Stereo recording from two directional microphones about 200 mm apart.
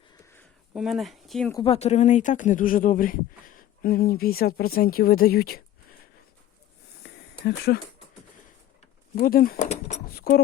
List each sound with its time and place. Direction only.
0.8 s speech: centre (ahead or behind)
1.5 s speech: 30° left (ahead or behind); by 5.6 s 50° left (ahead or behind)
7.0 s a sound: 55° left (ahead or behind)
9.1 s speech: 45° left (ahead or behind)
10.1 s speech: 50° left (ahead or behind)